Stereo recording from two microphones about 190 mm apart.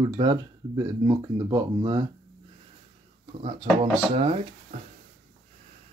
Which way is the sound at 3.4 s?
30° right (ahead or behind).